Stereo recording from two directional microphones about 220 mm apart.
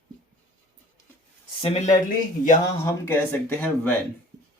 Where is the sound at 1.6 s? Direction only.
30° left (ahead or behind).